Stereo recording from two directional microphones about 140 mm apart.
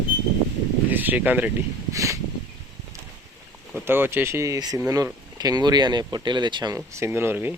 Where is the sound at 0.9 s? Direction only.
10° right (ahead or behind).